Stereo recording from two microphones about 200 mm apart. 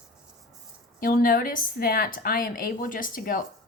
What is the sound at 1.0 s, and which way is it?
A woman's voice, 45° left (ahead or behind).